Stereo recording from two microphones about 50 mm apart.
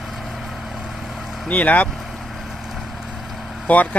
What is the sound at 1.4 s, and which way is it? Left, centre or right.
Speech, left.